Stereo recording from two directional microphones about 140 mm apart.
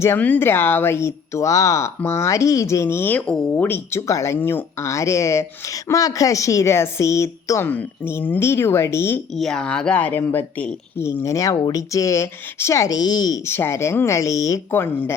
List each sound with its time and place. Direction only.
0.0 s speech: 15° left (ahead or behind)
9.3 s speech: 5° left (ahead or behind)